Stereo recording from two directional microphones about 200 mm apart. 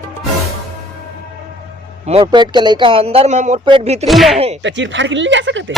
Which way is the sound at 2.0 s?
25° right (ahead or behind).